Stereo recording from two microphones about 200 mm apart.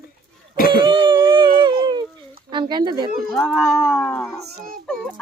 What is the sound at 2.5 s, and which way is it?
Speech, 25° right (ahead or behind).